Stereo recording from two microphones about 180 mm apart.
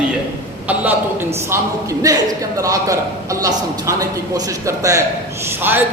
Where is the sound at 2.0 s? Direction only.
20° right (ahead or behind).